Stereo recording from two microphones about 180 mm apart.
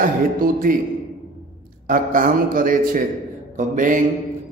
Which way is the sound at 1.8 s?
50° right (ahead or behind).